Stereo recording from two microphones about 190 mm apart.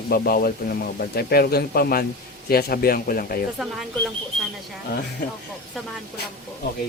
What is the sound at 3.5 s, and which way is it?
Speech, centre (ahead or behind).